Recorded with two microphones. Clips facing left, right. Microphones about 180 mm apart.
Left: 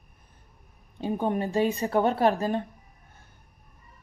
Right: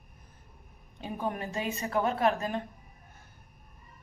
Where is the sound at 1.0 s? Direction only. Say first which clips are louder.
Left 7 dB; 30° left (ahead or behind).